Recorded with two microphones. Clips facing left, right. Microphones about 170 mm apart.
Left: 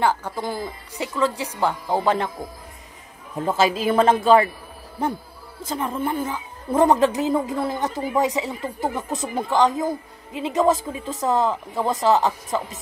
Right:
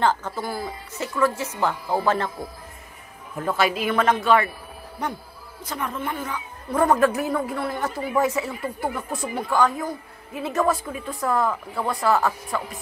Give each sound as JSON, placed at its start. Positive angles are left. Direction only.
{"t": 0.0, "sound": "speech", "side_deg": 10}
{"t": 3.3, "sound": "a woman's voice", "side_deg": 25}